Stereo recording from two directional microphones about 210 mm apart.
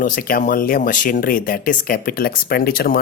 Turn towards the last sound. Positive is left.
turn(degrees=45)  # may be behind; listen again after turning